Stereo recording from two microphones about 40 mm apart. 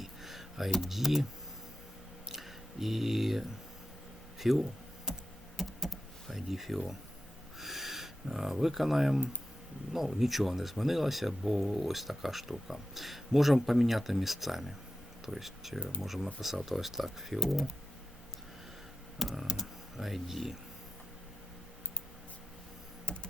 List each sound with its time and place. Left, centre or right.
0.0 s computer keyboard: centre
2.3 s a sound: centre
4.4 s speech: centre
5.1 s computer keyboard: centre
5.5 s power windows: centre
6.3 s speech: centre
19.3 s speech: centre
23.0 s a sound: left